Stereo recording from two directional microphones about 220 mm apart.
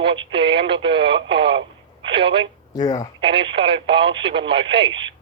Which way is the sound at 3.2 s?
25° right (ahead or behind).